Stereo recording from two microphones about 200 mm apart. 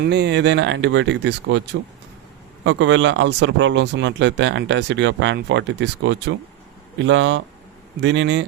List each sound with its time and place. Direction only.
0.0 s speech: 55° right (ahead or behind)
2.6 s speech: 65° right (ahead or behind)